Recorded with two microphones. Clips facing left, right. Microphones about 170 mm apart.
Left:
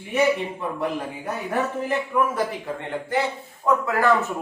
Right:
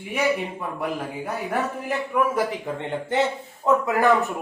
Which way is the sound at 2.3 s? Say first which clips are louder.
Right 1 dB; 20° right (ahead or behind).